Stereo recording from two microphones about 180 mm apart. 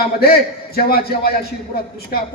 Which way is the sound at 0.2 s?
60° left (ahead or behind).